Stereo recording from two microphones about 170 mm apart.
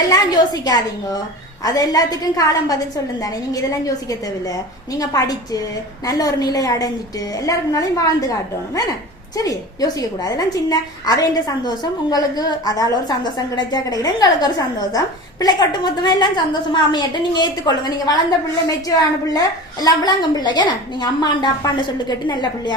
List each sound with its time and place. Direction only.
0.1 s a woman's voice: 25° left (ahead or behind)